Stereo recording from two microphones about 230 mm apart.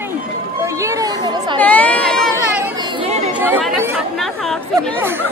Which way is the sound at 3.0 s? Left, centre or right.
Right.